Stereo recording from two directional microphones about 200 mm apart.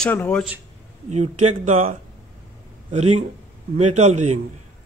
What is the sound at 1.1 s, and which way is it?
A man's voice, 35° right (ahead or behind).